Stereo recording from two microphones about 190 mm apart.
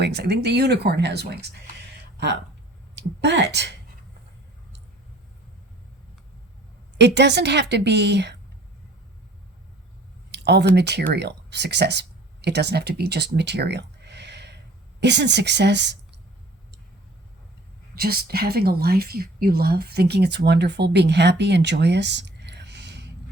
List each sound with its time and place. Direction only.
0.0 s speech: 60° right (ahead or behind)
3.2 s speech: 65° right (ahead or behind)
7.0 s speech: 65° right (ahead or behind)
10.3 s speech: 60° right (ahead or behind)
17.9 s speech: 55° right (ahead or behind)